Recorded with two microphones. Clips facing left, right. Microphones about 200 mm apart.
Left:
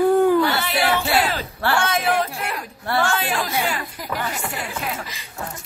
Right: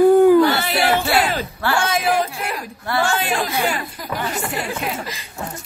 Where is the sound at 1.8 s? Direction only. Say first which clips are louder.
Right 3 dB; centre (ahead or behind).